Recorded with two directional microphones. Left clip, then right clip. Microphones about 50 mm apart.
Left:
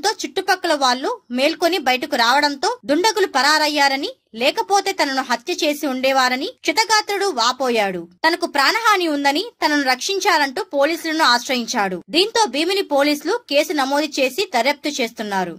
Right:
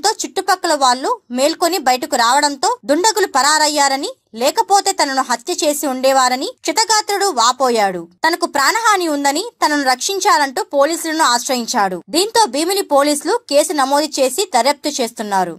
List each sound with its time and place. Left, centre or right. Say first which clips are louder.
0.0 s speech: right 3 dB; right
9.8 s speech: right 4 dB; right
12.1 s speech: right 1 dB; right